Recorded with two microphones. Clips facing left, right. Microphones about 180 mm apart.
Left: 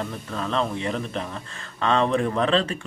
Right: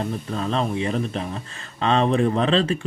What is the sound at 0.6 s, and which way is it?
Speech, 15° right (ahead or behind).